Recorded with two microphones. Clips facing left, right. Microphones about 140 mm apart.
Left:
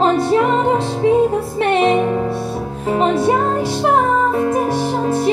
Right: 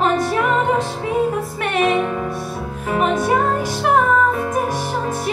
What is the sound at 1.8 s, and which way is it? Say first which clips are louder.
Music: right 1 dB; 30° left (ahead or behind).